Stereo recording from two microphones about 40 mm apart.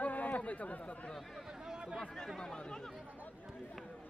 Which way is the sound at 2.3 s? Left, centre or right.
Centre.